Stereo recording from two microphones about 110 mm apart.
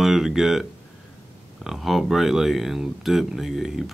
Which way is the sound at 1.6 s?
5° right (ahead or behind).